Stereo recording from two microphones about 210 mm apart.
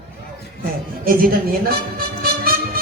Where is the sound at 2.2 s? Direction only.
45° right (ahead or behind).